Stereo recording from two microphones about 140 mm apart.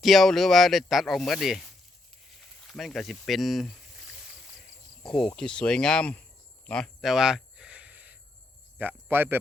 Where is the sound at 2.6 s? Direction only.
Centre (ahead or behind).